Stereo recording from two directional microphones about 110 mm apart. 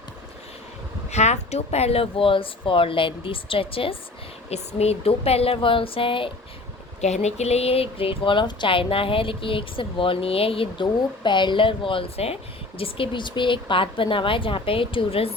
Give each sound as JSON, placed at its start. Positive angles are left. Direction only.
{"t": 1.1, "sound": "speech", "side_deg": 90}
{"t": 4.4, "sound": "speech", "side_deg": 75}
{"t": 7.0, "sound": "speech", "side_deg": 90}